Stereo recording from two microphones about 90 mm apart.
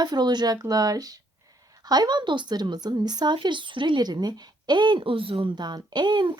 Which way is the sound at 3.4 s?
65° right (ahead or behind).